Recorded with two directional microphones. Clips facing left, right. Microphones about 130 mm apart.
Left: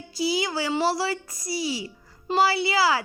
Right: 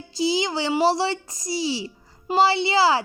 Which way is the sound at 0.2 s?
25° right (ahead or behind).